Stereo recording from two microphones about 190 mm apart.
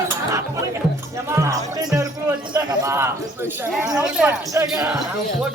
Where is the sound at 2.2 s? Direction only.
10° right (ahead or behind).